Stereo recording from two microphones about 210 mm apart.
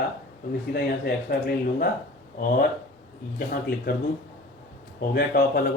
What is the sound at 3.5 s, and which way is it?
Speech, 45° left (ahead or behind).